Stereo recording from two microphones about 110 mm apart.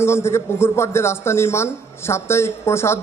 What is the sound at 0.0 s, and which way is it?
A man's voice, 25° left (ahead or behind).